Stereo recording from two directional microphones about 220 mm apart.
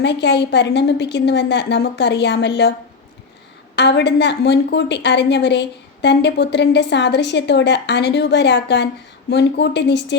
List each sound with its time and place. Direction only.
0.0 s a woman's voice: 50° left (ahead or behind)
3.8 s a woman's voice: 50° left (ahead or behind)